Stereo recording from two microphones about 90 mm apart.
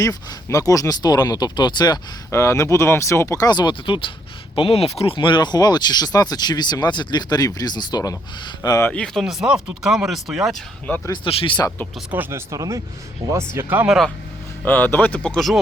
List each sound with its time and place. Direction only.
0.0 s speech: 40° left (ahead or behind)
2.3 s speech: 35° left (ahead or behind); by 4.1 s 70° left (ahead or behind)
4.5 s speech: 90° left; by 8.8 s 45° left (ahead or behind)
8.9 s speech: 10° left (ahead or behind)
9.2 s speech: 5° right (ahead or behind)
11.1 s speech: 80° left
12.1 s speech: 20° right (ahead or behind)
12.5 s speech: 35° right (ahead or behind)
13.8 s speech: 5° right (ahead or behind)
14.6 s speech: 20° left (ahead or behind)